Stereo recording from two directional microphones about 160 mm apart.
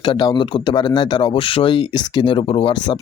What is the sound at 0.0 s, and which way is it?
Speech, 30° left (ahead or behind).